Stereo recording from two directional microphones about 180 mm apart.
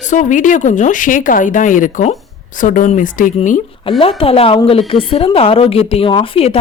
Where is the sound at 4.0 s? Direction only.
30° left (ahead or behind).